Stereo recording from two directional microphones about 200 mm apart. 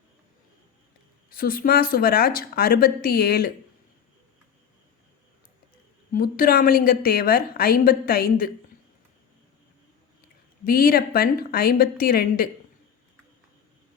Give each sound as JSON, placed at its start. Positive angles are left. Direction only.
{"t": 1.4, "sound": "a woman's voice", "side_deg": 45}
{"t": 6.1, "sound": "a woman's voice", "side_deg": 45}
{"t": 10.6, "sound": "a woman's voice", "side_deg": 45}